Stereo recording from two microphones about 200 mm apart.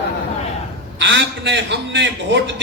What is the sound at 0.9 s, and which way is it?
A man's voice, 65° right (ahead or behind).